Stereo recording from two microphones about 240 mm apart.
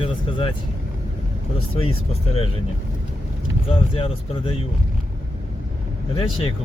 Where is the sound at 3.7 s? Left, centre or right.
Left.